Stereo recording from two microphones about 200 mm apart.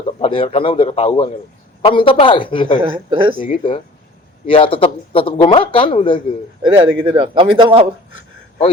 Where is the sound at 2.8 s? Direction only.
25° right (ahead or behind).